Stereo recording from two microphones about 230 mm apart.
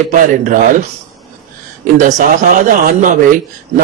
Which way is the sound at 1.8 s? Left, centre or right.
Right.